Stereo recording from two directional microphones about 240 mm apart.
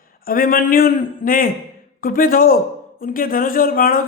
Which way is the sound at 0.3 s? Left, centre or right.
Left.